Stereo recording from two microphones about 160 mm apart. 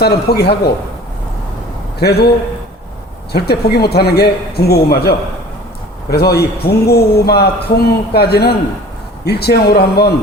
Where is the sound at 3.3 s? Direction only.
85° left.